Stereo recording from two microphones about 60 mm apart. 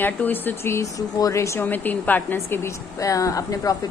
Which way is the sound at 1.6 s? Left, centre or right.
Left.